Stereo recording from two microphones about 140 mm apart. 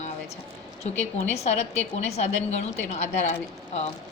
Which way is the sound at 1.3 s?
50° left (ahead or behind).